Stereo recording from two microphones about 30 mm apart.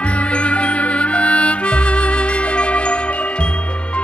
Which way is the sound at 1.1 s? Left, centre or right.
Left.